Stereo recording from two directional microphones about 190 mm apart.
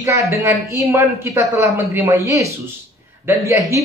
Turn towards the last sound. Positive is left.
turn(degrees=-15)  # may be behind; listen again after turning